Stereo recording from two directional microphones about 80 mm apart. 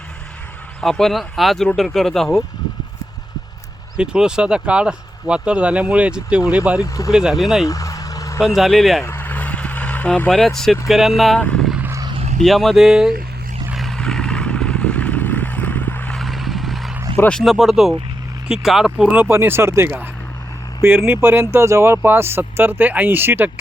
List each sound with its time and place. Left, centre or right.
0.8 s speech: centre
3.9 s speech: centre
6.8 s speech: left
7.1 s speech: centre
7.7 s vehicle: left
8.4 s speech: centre
9.0 s vehicle: left; by 11.1 s centre
11.3 s speech: centre
12.4 s speech: centre
13.7 s vehicle: centre; by 16.1 s left
16.1 s vehicle: centre
17.4 s speech: centre
19.2 s speech: right